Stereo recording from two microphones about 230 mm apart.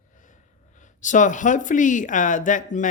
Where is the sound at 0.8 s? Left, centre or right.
Left.